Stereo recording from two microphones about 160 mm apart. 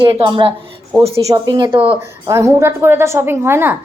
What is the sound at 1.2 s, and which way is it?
Speech, 20° right (ahead or behind).